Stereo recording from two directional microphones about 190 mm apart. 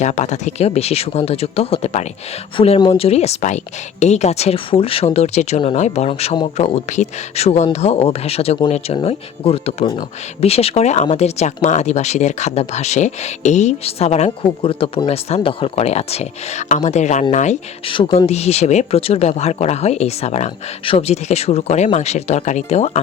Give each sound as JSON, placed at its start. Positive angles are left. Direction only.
{"t": 0.0, "sound": "speech", "side_deg": 40}